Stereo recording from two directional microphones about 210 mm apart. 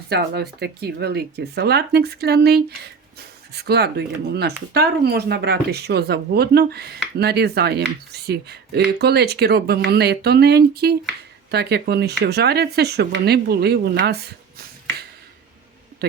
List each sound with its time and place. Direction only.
0.1 s speech: 50° right (ahead or behind)